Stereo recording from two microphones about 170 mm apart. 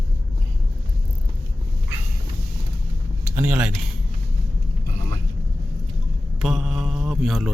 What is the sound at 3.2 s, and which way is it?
Speech, 15° right (ahead or behind).